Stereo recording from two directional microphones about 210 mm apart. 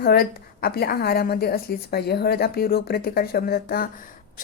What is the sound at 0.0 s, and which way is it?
A woman's voice, 45° left (ahead or behind).